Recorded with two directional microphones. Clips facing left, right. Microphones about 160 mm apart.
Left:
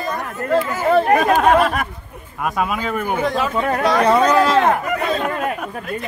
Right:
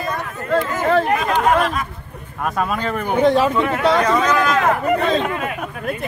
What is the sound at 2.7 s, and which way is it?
Speech, 5° left (ahead or behind).